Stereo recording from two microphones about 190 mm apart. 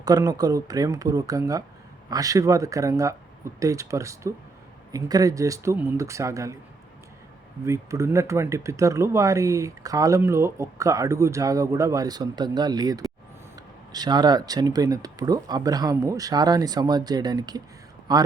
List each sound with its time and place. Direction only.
0.0 s speech: 20° right (ahead or behind)
7.6 s speech: 15° right (ahead or behind)